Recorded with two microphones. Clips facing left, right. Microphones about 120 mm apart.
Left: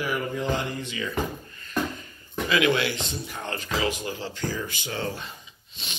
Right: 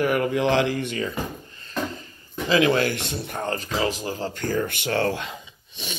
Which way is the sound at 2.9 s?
60° right (ahead or behind).